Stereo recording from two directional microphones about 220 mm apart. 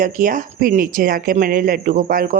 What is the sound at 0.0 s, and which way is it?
Speech, 35° right (ahead or behind).